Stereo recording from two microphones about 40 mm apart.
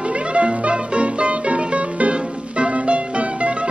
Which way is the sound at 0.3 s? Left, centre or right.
Right.